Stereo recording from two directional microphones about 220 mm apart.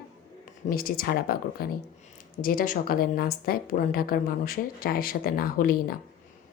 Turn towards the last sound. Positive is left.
turn(degrees=40)  # may be behind; listen again after turning